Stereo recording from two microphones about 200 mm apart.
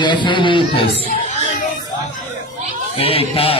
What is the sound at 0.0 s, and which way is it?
Speech, 20° left (ahead or behind).